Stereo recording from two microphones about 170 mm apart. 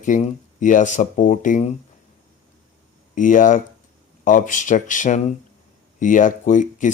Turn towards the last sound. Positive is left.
turn(degrees=50)  # may be behind; listen again after turning